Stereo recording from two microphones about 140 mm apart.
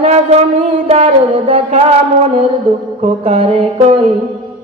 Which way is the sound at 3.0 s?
50° right (ahead or behind).